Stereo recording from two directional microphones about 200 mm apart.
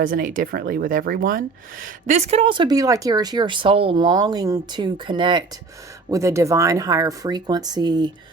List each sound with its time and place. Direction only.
0.0 s speech: 40° right (ahead or behind); by 8.1 s 20° right (ahead or behind)